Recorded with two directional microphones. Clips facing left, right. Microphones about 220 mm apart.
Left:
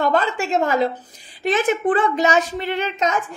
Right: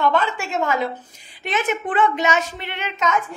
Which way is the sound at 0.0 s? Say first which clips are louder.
Left 1 dB; 40° left (ahead or behind).